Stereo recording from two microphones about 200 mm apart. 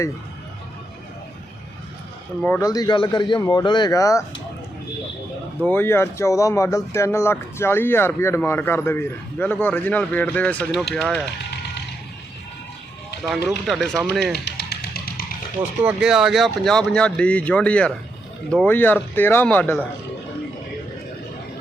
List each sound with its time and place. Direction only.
2.4 s a man's voice: 10° left (ahead or behind)
5.6 s speech: 10° left (ahead or behind)
13.2 s speech: centre (ahead or behind)
14.4 s music: 55° left (ahead or behind)
15.8 s speech: 5° right (ahead or behind)